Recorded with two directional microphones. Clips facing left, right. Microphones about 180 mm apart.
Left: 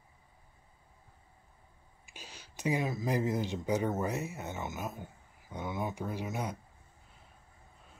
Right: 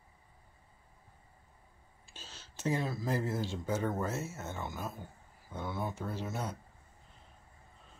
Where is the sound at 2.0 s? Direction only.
15° left (ahead or behind).